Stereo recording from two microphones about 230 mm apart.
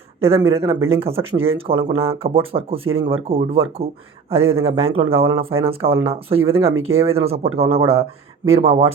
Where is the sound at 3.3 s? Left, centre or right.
Right.